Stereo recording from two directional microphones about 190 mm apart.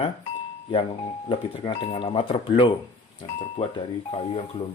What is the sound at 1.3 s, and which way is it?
Speech, 25° left (ahead or behind).